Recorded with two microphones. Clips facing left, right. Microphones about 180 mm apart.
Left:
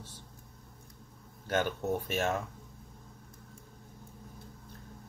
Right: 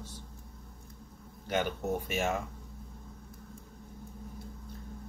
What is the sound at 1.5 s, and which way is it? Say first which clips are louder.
Speech: left 1 dB; 10° right (ahead or behind).